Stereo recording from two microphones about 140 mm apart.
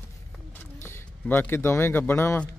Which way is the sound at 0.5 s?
15° left (ahead or behind).